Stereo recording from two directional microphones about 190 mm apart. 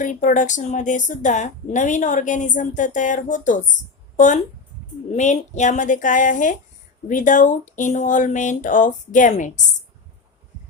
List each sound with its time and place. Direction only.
0.0 s speech: 40° left (ahead or behind)
5.1 s speech: 40° left (ahead or behind)